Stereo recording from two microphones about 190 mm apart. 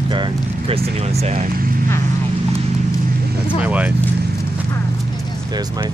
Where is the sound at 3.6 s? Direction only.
5° right (ahead or behind).